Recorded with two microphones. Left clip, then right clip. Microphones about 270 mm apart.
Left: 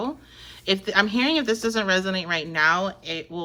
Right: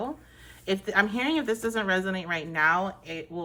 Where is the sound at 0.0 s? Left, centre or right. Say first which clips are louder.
Left 4 dB; centre.